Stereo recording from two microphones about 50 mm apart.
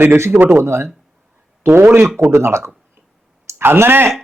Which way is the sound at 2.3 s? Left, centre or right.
Right.